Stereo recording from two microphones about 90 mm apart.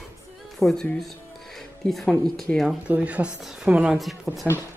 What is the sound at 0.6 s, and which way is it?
Speech, 5° left (ahead or behind).